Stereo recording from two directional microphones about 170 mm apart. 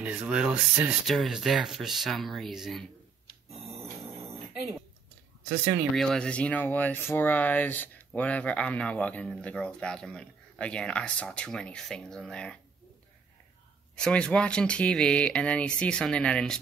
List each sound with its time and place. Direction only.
0.0 s speech: 5° right (ahead or behind)
5.9 s speech: 5° left (ahead or behind)
13.9 s speech: 5° left (ahead or behind)